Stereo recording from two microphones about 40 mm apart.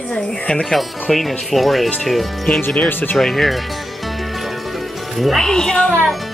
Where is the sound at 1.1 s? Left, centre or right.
Centre.